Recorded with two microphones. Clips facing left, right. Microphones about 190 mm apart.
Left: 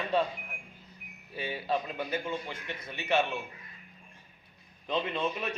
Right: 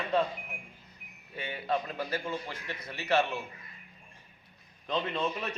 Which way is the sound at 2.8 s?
25° left (ahead or behind).